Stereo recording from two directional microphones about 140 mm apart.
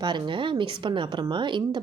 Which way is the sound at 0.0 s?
35° right (ahead or behind).